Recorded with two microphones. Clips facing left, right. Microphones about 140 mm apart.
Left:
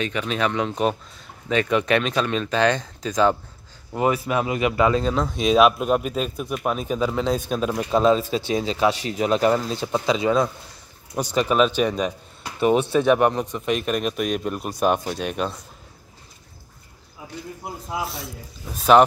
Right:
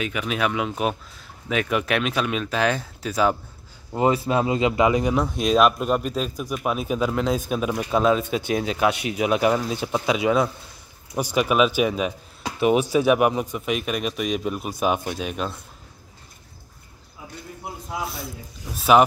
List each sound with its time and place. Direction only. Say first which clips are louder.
0.0 s speech: left 1 dB; 5° right (ahead or behind)
3.9 s speech: right 1 dB; 25° right (ahead or behind)
5.4 s speech: left 3 dB; centre (ahead or behind)
17.9 s speech: left 1 dB; centre (ahead or behind)